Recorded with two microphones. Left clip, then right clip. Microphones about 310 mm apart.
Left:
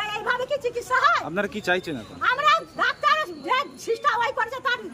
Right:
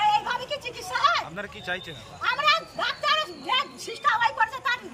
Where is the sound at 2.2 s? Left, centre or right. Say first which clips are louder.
Left 3 dB; centre.